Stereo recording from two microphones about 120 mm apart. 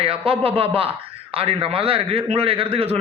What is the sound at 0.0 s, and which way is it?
Speech, 55° right (ahead or behind).